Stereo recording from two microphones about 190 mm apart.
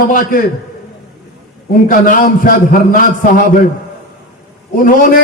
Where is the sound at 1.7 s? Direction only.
45° left (ahead or behind).